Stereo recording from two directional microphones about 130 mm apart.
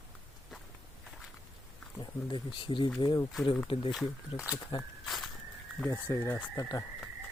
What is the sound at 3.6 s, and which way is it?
Speech, 45° left (ahead or behind).